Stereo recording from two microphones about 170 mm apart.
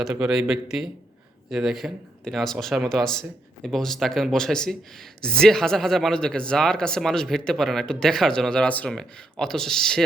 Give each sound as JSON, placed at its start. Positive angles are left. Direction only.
{"t": 0.0, "sound": "speech", "side_deg": -5}